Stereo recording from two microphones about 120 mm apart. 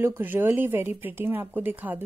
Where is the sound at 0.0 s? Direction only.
15° right (ahead or behind).